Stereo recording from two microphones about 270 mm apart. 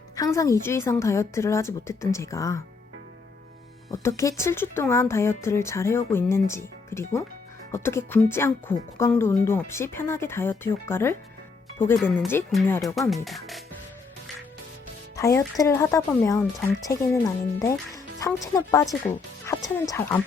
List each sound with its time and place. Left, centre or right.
0.2 s speech: centre
4.2 s speech: centre
15.1 s speech: centre